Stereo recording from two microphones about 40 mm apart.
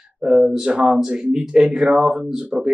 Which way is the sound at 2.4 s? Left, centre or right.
Right.